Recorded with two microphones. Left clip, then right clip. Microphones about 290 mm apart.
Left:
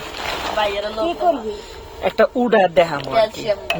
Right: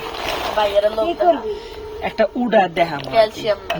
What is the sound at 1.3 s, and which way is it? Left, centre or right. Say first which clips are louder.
Speech: right 2 dB; left.